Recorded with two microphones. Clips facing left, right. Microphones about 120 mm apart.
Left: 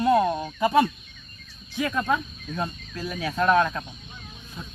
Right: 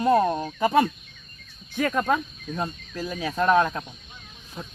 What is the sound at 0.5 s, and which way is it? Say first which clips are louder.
Speech: left 1 dB; 40° right (ahead or behind).